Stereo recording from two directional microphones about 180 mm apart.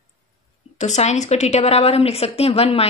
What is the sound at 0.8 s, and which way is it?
A woman's voice, 40° left (ahead or behind).